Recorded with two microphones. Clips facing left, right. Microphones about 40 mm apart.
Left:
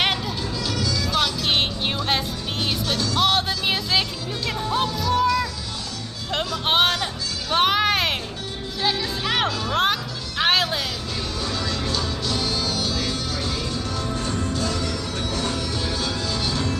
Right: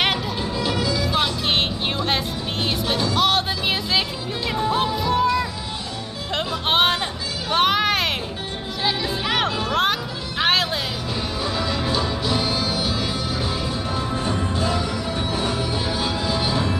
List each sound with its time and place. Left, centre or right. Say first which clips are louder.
0.6 s music: right 4 dB; right
2.0 s music: right 1 dB; centre
2.9 s music: right 2 dB; centre
3.2 s music: left 1 dB; centre
6.6 s a sound: right 1 dB; centre
8.8 s music: right 1 dB; centre
11.4 s music: right 3 dB; centre